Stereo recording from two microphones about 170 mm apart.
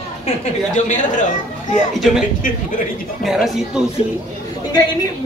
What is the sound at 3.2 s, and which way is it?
Speech, centre (ahead or behind).